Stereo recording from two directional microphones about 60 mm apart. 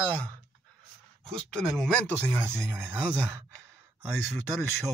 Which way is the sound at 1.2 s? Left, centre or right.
Centre.